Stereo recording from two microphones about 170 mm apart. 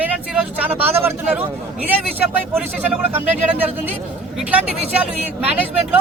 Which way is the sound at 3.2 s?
40° right (ahead or behind).